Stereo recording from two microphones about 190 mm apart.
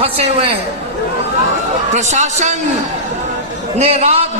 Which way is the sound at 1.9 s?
40° right (ahead or behind).